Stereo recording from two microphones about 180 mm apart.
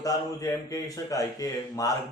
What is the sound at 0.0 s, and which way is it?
A man's voice, 20° left (ahead or behind).